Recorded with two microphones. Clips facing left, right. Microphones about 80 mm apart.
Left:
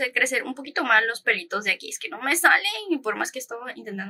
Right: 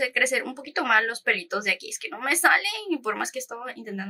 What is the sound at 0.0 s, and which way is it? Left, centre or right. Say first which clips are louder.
Speech: even; centre.